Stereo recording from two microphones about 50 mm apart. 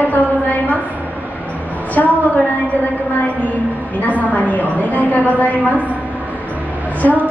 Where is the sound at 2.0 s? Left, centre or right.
Left.